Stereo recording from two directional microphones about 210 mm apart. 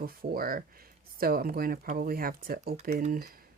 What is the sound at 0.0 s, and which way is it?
Speech, 45° right (ahead or behind).